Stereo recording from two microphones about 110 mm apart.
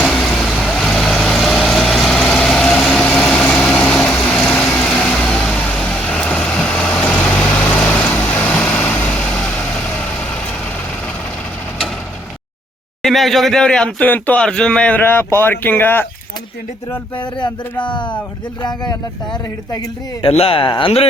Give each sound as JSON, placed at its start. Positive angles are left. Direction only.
{"t": 0.0, "sound": "vehicle", "side_deg": 0}
{"t": 13.0, "sound": "speech", "side_deg": 0}
{"t": 17.2, "sound": "speech", "side_deg": 45}
{"t": 20.2, "sound": "speech", "side_deg": 60}